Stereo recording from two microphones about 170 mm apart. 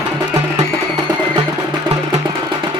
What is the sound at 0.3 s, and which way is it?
Music, 25° right (ahead or behind).